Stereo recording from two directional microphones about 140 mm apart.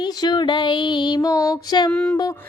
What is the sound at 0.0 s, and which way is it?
Music, 30° left (ahead or behind).